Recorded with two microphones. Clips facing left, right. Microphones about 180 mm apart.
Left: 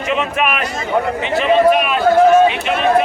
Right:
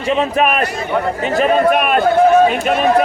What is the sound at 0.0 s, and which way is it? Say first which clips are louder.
Speech: right 3 dB; 35° right (ahead or behind).